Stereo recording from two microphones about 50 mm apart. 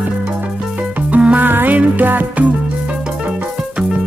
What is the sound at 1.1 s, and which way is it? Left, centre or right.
Music, right.